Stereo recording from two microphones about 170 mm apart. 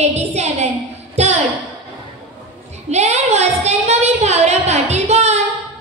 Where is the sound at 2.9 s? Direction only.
40° right (ahead or behind).